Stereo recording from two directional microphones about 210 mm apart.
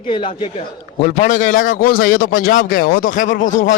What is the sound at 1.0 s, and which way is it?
Speech, 35° left (ahead or behind).